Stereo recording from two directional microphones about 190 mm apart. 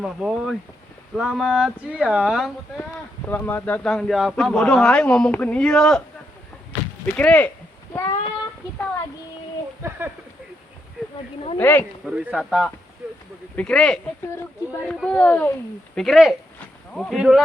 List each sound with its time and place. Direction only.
0.0 s a man's voice: 5° right (ahead or behind)
3.2 s a man's voice: 10° left (ahead or behind)
7.0 s speech: 5° left (ahead or behind)
7.9 s child singing: 20° left (ahead or behind)
11.5 s speech: 10° left (ahead or behind)
12.0 s a man's voice: 5° right (ahead or behind)